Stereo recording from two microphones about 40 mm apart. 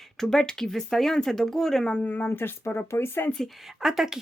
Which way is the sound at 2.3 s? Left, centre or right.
Left.